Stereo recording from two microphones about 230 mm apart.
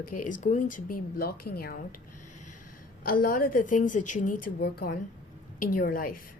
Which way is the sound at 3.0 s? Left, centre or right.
Left.